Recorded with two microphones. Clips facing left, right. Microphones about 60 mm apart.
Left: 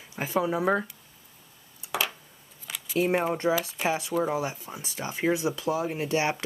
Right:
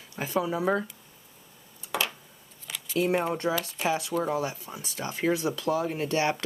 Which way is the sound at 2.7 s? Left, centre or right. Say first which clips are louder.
Left 1 dB; centre.